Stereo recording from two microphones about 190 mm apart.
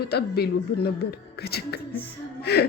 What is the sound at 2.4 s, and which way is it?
Music, 55° left (ahead or behind).